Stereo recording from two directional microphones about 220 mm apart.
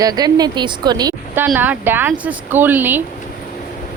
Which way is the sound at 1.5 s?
5° right (ahead or behind).